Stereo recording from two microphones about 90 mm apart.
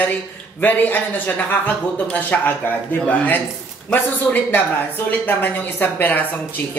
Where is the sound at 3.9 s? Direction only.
20° left (ahead or behind).